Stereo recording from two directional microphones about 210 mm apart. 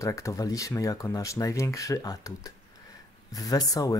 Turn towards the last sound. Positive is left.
turn(degrees=15)  # may be behind; listen again after turning